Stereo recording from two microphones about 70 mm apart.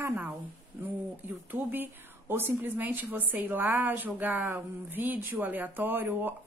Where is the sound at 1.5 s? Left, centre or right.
Right.